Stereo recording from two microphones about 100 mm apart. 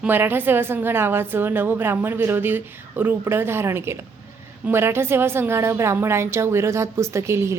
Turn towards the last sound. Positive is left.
turn(degrees=-30)  # may be behind; listen again after turning